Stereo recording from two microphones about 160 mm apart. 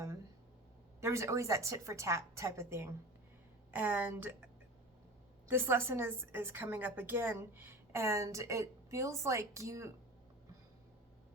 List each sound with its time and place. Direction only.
1.0 s a woman's voice: 20° right (ahead or behind)
5.5 s a woman's voice: 15° right (ahead or behind)